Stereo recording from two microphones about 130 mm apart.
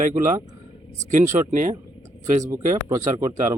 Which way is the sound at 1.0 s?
65° right (ahead or behind).